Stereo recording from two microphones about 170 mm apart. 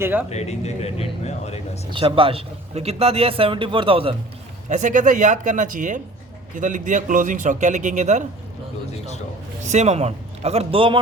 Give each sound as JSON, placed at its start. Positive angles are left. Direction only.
{"t": 0.0, "sound": "speech", "side_deg": -10}
{"t": 0.3, "sound": "speech", "side_deg": 40}
{"t": 1.9, "sound": "a man's voice", "side_deg": -30}
{"t": 4.7, "sound": "a man's voice", "side_deg": -50}
{"t": 9.6, "sound": "a man's voice", "side_deg": -40}